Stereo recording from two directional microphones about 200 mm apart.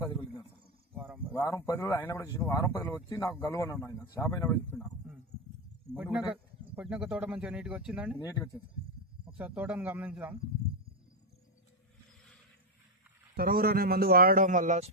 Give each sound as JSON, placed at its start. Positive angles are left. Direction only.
{"t": 0.0, "sound": "a sound", "side_deg": 20}
{"t": 0.9, "sound": "a sound", "side_deg": -10}
{"t": 1.4, "sound": "speech", "side_deg": 15}
{"t": 6.0, "sound": "speech", "side_deg": -5}
{"t": 9.4, "sound": "a man's voice", "side_deg": -10}
{"t": 13.3, "sound": "a man's voice", "side_deg": -45}